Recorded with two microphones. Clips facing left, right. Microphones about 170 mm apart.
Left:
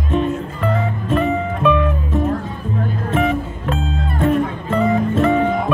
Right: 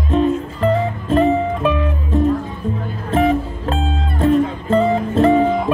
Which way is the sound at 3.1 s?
35° right (ahead or behind).